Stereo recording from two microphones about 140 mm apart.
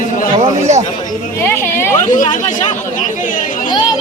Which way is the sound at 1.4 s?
20° left (ahead or behind).